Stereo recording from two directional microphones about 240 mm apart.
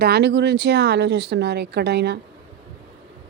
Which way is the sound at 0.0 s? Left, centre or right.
Right.